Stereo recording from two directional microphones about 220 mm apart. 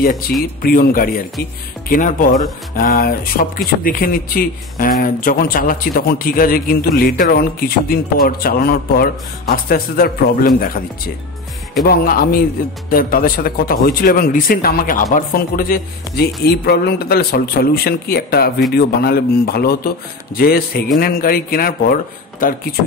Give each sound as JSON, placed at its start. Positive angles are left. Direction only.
{"t": 0.0, "sound": "a man's voice", "side_deg": 40}
{"t": 11.8, "sound": "a man's voice", "side_deg": 45}